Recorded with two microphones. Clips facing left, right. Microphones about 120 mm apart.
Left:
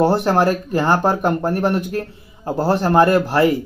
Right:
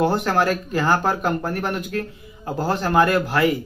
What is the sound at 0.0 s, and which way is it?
Speech, 30° left (ahead or behind).